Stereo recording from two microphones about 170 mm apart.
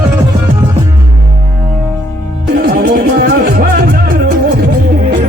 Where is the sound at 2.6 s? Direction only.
60° right (ahead or behind).